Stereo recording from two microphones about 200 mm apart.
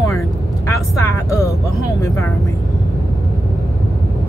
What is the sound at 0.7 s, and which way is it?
Speech, 15° left (ahead or behind).